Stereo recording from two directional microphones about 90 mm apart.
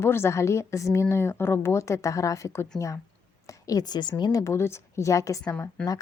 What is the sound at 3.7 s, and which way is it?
A woman's voice, 50° left (ahead or behind).